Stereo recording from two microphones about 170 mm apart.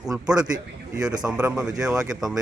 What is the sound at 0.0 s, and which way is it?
Speech, 5° right (ahead or behind).